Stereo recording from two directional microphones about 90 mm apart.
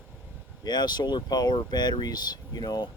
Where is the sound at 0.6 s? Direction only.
50° left (ahead or behind).